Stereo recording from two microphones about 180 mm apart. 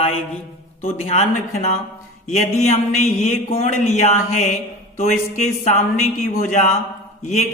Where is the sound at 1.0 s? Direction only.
40° left (ahead or behind).